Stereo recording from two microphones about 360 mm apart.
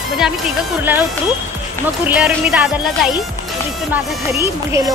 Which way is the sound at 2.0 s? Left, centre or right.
Centre.